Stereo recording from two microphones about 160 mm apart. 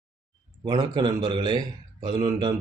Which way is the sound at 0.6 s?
25° right (ahead or behind).